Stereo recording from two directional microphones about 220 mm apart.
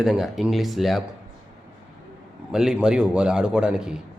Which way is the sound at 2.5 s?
5° right (ahead or behind).